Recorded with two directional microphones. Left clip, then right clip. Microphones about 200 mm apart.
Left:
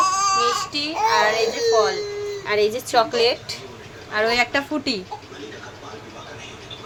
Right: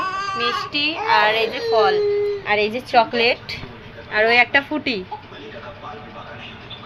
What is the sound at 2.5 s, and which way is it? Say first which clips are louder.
A woman's voice: right 1 dB; 10° left (ahead or behind).